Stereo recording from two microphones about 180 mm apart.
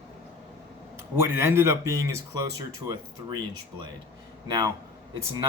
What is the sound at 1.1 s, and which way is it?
Speech, 15° right (ahead or behind).